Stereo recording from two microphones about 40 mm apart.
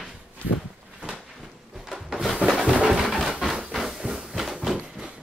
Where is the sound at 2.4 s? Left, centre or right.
Right.